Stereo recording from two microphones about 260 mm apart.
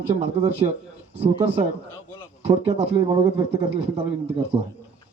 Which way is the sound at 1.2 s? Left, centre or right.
Right.